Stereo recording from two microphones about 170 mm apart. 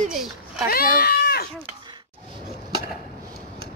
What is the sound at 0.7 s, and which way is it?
Speech, 60° left (ahead or behind).